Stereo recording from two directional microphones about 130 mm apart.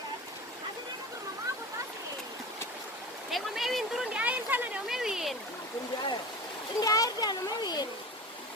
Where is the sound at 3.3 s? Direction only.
Centre (ahead or behind).